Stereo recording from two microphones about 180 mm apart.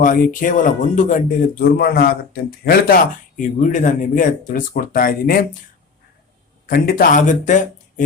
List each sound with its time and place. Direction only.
0.0 s speech: 45° left (ahead or behind)
1.7 s speech: 60° left (ahead or behind)
6.7 s speech: 50° left (ahead or behind)